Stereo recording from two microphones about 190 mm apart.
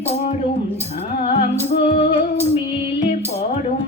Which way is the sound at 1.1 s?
45° left (ahead or behind).